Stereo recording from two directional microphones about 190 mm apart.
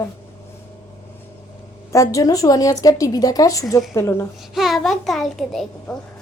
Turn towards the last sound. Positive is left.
turn(degrees=0)  # may be behind; listen again after turning